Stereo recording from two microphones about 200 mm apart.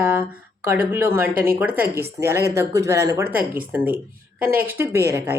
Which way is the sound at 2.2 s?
15° right (ahead or behind).